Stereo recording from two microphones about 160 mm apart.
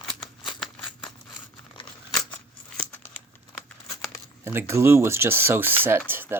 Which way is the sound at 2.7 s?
10° left (ahead or behind).